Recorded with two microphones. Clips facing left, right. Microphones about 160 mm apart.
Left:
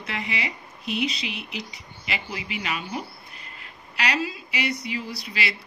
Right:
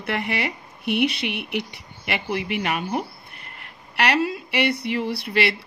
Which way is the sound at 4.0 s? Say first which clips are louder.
Right 6 dB; 60° right (ahead or behind).